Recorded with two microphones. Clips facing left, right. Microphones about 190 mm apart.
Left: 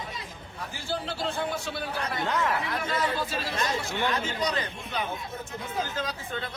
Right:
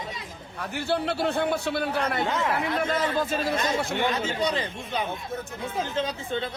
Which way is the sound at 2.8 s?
50° right (ahead or behind).